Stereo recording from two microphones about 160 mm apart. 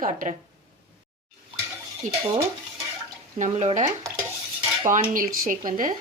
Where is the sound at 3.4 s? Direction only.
45° right (ahead or behind).